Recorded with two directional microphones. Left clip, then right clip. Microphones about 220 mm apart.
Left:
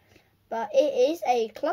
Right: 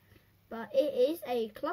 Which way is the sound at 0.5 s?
40° left (ahead or behind).